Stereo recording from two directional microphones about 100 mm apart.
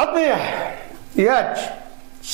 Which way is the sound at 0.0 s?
15° right (ahead or behind).